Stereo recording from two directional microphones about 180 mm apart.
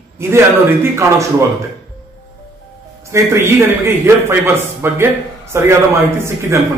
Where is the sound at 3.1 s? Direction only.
15° right (ahead or behind).